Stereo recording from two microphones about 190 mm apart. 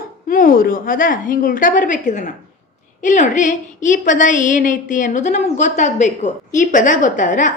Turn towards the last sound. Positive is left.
turn(degrees=40)  # may be behind; listen again after turning